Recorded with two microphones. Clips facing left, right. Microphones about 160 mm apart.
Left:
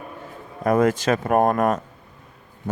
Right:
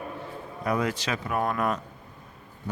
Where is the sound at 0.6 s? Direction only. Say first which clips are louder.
Left 9 dB; 45° left (ahead or behind).